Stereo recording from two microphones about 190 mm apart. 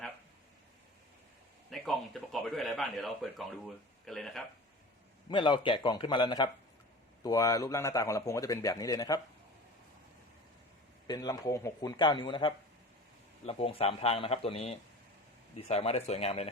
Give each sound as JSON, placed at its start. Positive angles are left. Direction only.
{"t": 1.7, "sound": "speech", "side_deg": 0}
{"t": 5.3, "sound": "a man's voice", "side_deg": 25}
{"t": 11.0, "sound": "a man's voice", "side_deg": 20}